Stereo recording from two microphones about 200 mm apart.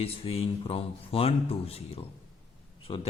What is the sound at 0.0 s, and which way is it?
A man's voice, 30° left (ahead or behind).